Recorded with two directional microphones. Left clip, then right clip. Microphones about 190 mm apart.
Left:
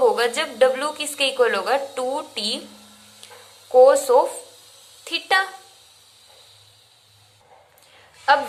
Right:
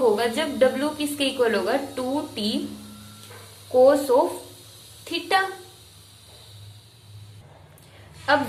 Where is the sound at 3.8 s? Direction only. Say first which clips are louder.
Left 3 dB; 35° left (ahead or behind).